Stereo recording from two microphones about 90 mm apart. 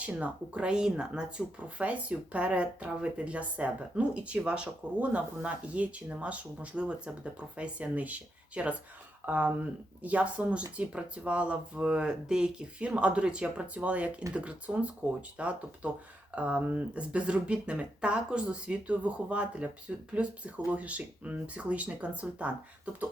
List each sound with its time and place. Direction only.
0.0 s speech: 15° right (ahead or behind)